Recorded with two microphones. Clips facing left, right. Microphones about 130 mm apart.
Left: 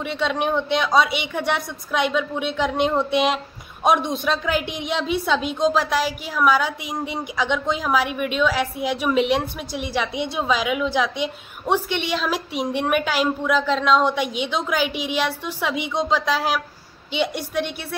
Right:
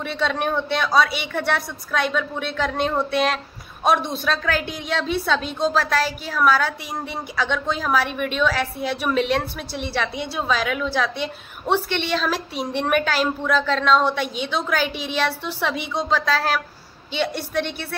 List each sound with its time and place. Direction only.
0.0 s a woman's voice: 15° left (ahead or behind)